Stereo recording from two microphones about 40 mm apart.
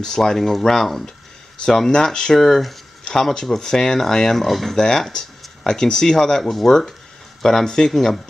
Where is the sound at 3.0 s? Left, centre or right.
Centre.